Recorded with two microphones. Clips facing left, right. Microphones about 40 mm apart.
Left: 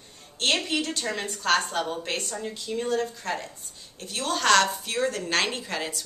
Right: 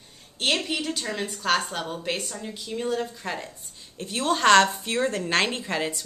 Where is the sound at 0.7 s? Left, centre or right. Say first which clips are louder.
Left 1 dB; centre.